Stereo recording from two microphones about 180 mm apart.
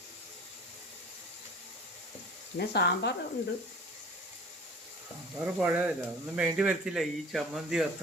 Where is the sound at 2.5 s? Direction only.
65° left (ahead or behind).